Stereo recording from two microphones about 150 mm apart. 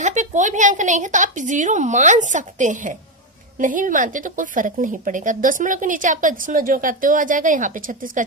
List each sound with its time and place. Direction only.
0.0 s speech: 55° right (ahead or behind)